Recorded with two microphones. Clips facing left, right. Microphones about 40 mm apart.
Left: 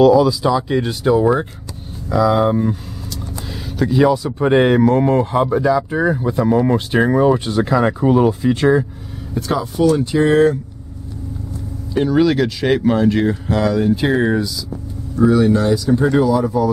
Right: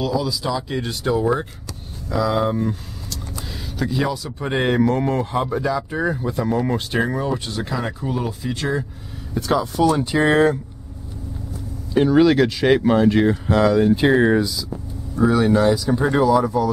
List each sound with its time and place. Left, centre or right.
0.1 s speech: centre
7.8 s speech: left
9.3 s speech: centre
10.1 s speech: right
11.9 s speech: centre
16.4 s speech: centre